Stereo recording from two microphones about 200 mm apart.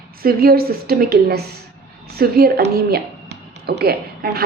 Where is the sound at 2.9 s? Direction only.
55° right (ahead or behind).